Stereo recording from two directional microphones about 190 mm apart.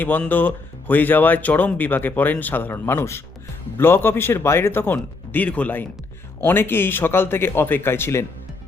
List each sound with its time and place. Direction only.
0.0 s speech: 10° left (ahead or behind)